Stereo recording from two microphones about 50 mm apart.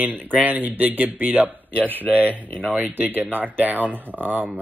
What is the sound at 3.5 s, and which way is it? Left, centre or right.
Speech, right.